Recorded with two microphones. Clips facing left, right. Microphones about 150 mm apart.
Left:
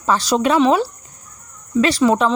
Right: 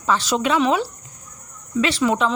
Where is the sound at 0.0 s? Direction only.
40° left (ahead or behind).